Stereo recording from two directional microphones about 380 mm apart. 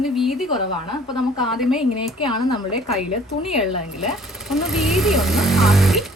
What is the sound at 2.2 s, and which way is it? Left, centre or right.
Speech, centre.